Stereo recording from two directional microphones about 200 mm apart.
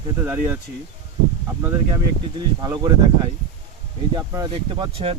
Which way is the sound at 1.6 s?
15° right (ahead or behind).